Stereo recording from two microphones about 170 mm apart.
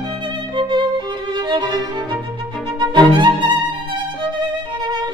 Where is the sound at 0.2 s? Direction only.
30° right (ahead or behind).